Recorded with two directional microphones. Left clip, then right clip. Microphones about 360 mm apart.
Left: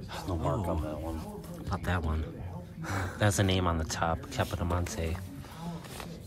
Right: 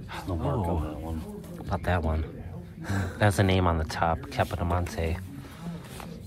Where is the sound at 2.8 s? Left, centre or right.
Right.